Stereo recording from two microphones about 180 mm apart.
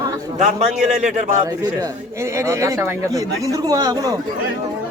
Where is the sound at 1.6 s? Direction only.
20° right (ahead or behind).